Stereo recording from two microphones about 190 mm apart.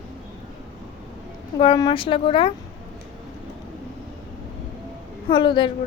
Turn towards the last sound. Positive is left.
turn(degrees=25)  # may be behind; listen again after turning